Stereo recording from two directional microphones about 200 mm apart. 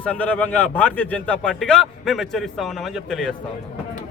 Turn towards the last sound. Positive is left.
turn(degrees=0)  # may be behind; listen again after turning